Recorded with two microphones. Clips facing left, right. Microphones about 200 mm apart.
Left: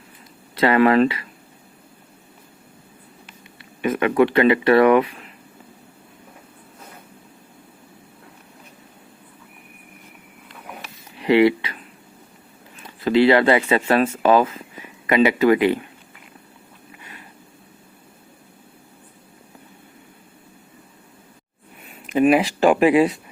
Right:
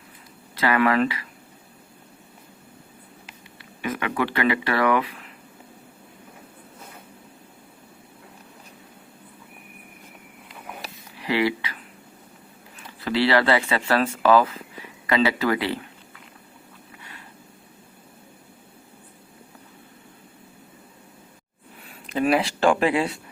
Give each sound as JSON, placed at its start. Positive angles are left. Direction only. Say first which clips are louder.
{"t": 0.5, "sound": "speech", "louder": "left 5 dB", "side_deg": 30}
{"t": 3.6, "sound": "speech", "louder": "left 8 dB", "side_deg": 25}
{"t": 11.2, "sound": "speech", "louder": "left 8 dB", "side_deg": 25}
{"t": 12.8, "sound": "speech", "louder": "left 7 dB", "side_deg": 20}
{"t": 22.1, "sound": "speech", "louder": "left 5 dB", "side_deg": 15}